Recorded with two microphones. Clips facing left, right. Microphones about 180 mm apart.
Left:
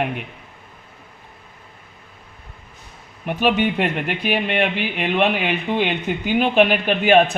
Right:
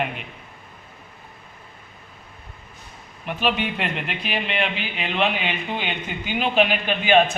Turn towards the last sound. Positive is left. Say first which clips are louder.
# left 3 dB
turn(degrees=50)  # may be behind; listen again after turning